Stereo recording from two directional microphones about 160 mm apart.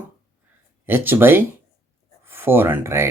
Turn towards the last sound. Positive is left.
turn(degrees=-15)  # may be behind; listen again after turning